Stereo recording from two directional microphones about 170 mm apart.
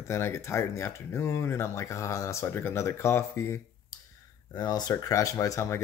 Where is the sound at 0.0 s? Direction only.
15° left (ahead or behind).